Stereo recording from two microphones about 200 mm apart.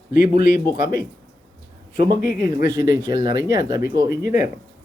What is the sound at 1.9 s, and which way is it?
Speech, 20° right (ahead or behind).